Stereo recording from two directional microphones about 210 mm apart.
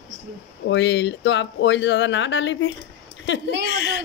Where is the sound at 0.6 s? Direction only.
60° left (ahead or behind).